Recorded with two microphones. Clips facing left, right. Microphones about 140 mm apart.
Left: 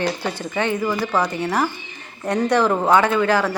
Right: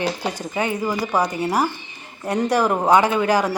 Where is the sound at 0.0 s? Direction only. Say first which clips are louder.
Left 1 dB; 15° right (ahead or behind).